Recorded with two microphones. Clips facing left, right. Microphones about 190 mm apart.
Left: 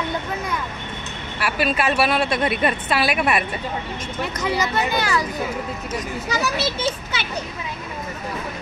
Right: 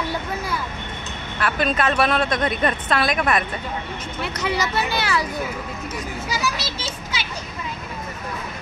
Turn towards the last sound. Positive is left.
turn(degrees=55)  # may be behind; listen again after turning